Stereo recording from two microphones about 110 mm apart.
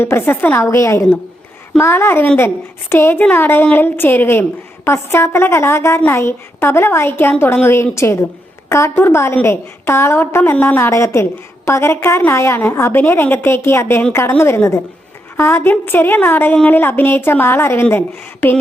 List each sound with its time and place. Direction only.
0.0 s a woman's voice: 20° left (ahead or behind)